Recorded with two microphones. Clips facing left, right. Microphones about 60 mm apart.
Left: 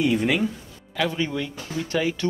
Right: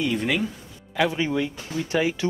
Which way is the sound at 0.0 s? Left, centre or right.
Centre.